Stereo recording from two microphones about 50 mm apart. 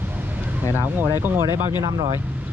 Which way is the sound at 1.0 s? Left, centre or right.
Right.